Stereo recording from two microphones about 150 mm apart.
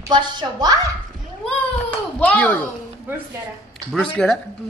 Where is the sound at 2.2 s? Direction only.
10° left (ahead or behind).